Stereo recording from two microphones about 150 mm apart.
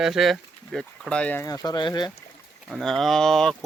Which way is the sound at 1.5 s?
25° left (ahead or behind).